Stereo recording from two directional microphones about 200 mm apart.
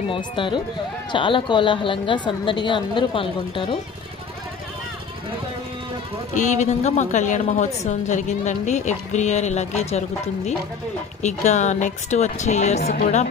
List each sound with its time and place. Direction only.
0.1 s a woman's voice: 25° left (ahead or behind)
6.3 s a woman's voice: 35° left (ahead or behind)